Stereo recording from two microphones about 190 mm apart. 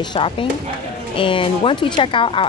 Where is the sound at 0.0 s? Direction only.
25° left (ahead or behind).